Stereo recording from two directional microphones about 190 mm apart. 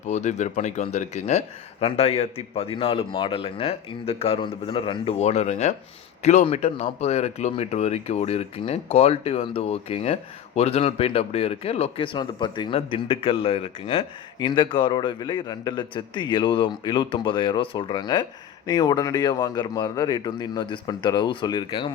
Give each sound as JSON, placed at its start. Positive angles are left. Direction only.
{"t": 0.0, "sound": "speech", "side_deg": 40}